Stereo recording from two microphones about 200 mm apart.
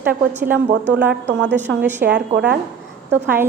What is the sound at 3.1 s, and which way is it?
Speech, 10° right (ahead or behind).